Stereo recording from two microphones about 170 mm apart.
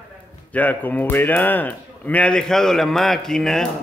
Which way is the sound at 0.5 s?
10° left (ahead or behind).